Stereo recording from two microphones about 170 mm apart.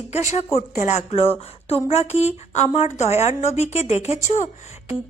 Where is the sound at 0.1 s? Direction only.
40° left (ahead or behind).